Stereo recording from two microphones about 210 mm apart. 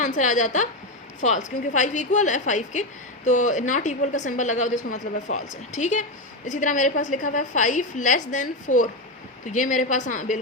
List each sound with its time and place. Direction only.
0.0 s a woman's voice: 35° left (ahead or behind)